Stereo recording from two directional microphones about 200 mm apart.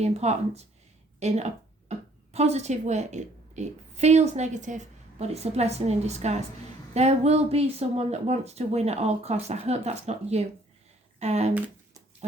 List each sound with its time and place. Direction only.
0.0 s speech: 35° right (ahead or behind)